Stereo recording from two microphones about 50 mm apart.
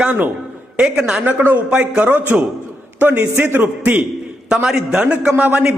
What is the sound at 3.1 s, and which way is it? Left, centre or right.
Speech, right.